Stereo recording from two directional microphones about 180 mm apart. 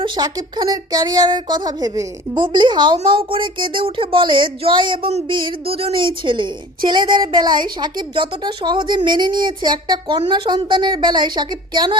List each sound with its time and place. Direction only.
0.0 s speech: 25° right (ahead or behind)